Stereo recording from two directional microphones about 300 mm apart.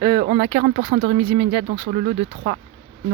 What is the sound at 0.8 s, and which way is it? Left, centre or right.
Speech, right.